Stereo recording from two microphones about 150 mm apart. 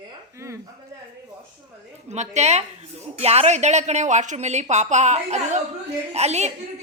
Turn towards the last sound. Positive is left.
turn(degrees=-45)  # may be behind; listen again after turning